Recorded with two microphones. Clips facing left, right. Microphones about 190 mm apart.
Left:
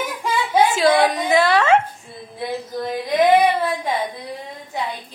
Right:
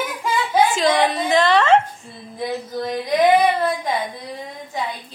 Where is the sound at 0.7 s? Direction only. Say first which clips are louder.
Left 2 dB; 10° left (ahead or behind).